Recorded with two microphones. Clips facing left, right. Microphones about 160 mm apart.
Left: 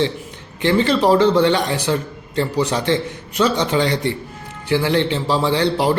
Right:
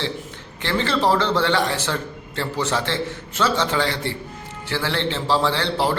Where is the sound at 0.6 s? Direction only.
15° left (ahead or behind).